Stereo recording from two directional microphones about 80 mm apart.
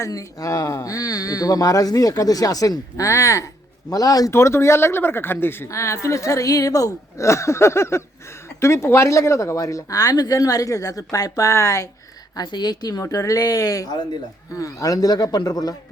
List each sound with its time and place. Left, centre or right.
0.0 s speech: left
4.3 s speech: left
12.4 s speech: left